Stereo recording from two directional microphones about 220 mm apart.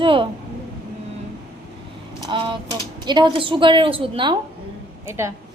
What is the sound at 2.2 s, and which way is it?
A woman's voice, 20° right (ahead or behind).